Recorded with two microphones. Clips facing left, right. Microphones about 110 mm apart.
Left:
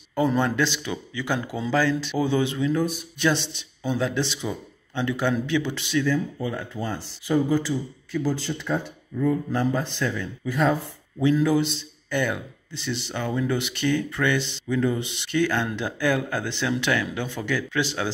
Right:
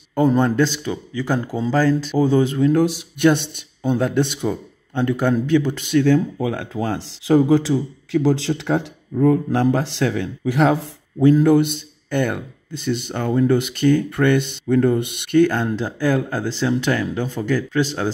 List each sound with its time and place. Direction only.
0.1 s speech: 40° right (ahead or behind)
2.7 s speech: 80° right
3.3 s speech: 55° right (ahead or behind)
6.0 s speech: 70° right (ahead or behind); by 8.9 s 85° right
9.2 s speech: 70° right (ahead or behind)
11.1 s speech: 45° right (ahead or behind)